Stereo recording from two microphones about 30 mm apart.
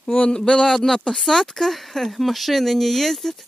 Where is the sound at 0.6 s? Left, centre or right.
Centre.